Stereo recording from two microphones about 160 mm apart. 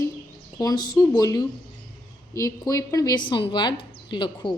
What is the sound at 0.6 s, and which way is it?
A woman's voice, 25° left (ahead or behind).